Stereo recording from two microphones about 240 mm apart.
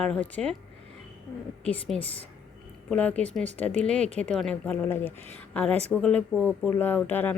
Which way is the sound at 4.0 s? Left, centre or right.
Right.